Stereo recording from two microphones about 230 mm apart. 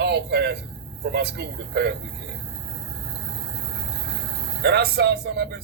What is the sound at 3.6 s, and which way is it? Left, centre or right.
Speech, right.